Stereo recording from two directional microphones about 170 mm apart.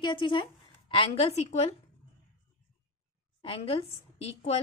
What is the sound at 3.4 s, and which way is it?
A woman's voice, 35° left (ahead or behind).